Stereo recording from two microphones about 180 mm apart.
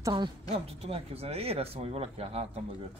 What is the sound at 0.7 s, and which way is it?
Speech, 35° right (ahead or behind).